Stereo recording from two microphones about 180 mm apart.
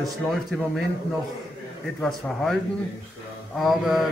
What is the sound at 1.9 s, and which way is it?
Speech, 5° left (ahead or behind).